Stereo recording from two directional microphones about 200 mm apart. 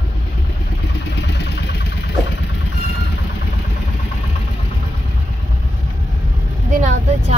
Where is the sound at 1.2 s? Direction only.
60° left (ahead or behind).